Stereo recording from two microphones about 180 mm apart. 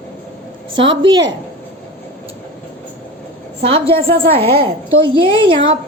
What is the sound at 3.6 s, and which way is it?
A woman's voice, 30° right (ahead or behind).